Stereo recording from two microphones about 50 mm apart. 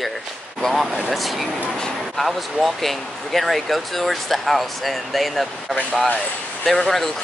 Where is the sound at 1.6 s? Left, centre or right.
Centre.